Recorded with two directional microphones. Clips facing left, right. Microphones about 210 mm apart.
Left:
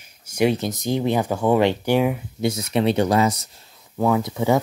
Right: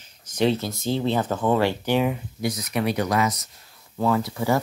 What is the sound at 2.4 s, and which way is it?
Speech, 25° left (ahead or behind).